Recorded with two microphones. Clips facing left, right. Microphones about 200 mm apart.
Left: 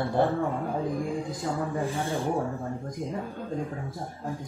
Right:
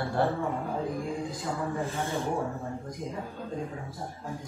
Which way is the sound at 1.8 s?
15° left (ahead or behind).